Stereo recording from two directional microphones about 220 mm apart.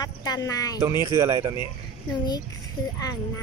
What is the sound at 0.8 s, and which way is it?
Speech, 10° right (ahead or behind).